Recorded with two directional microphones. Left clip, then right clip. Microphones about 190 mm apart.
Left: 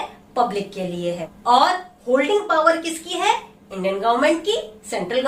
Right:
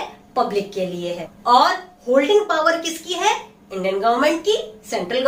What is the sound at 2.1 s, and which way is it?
A woman's voice, 10° right (ahead or behind).